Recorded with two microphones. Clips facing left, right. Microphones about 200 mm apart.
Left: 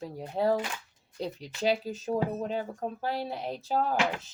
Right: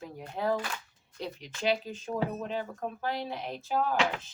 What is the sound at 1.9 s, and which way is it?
Speech, 35° left (ahead or behind).